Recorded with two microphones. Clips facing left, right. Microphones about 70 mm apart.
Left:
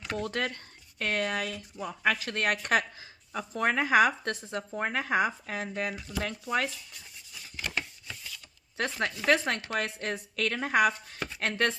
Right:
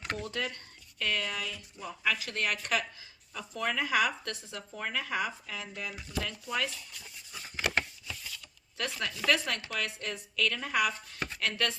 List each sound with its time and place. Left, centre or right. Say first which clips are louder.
0.2 s speech: left 4 dB; left
7.6 s a sound: right 5 dB; right
8.8 s speech: left 4 dB; left
9.7 s speech: left 4 dB; left